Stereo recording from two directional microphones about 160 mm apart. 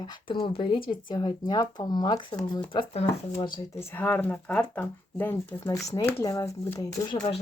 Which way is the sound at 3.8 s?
10° left (ahead or behind).